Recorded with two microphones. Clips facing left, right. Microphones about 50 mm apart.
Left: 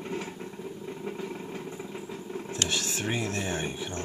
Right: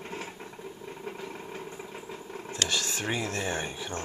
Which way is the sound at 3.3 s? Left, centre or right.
Centre.